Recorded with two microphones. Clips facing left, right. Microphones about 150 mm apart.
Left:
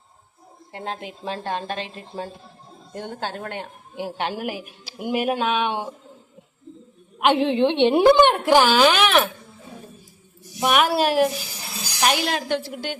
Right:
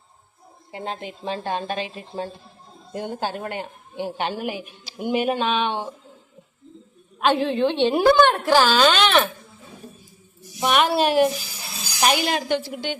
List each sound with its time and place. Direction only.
0.7 s a woman's voice: centre (ahead or behind)
7.2 s a woman's voice: 20° left (ahead or behind)
10.6 s a woman's voice: 5° left (ahead or behind)